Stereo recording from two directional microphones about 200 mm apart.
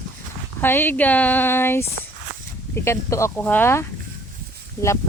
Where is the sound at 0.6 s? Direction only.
10° left (ahead or behind).